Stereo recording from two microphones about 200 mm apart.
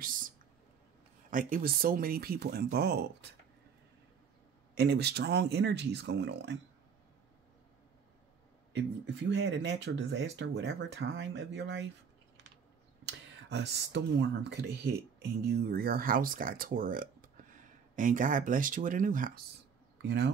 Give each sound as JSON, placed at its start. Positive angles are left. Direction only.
{"t": 1.3, "sound": "speech", "side_deg": -45}
{"t": 4.7, "sound": "speech", "side_deg": -55}
{"t": 8.7, "sound": "speech", "side_deg": -60}
{"t": 13.0, "sound": "speech", "side_deg": -60}
{"t": 20.0, "sound": "speech", "side_deg": -55}